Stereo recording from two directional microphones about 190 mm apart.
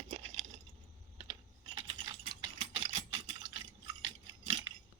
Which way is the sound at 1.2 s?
30° right (ahead or behind).